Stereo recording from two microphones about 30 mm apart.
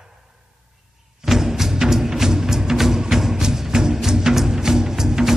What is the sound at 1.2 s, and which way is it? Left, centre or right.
Music, centre.